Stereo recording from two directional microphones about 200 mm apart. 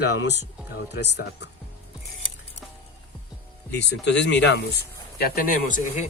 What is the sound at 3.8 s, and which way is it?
Speech, 60° left (ahead or behind).